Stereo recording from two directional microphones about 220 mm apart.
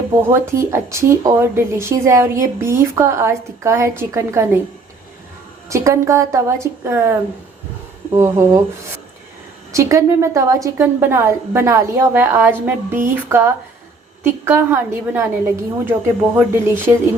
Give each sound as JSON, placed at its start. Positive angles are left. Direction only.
{"t": 0.3, "sound": "speech", "side_deg": -10}
{"t": 5.6, "sound": "speech", "side_deg": -15}
{"t": 9.7, "sound": "speech", "side_deg": -15}